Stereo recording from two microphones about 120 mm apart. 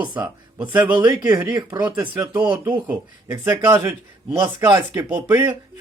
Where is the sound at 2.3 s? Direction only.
15° right (ahead or behind).